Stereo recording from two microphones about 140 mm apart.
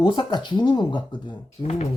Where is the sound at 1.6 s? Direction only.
55° left (ahead or behind).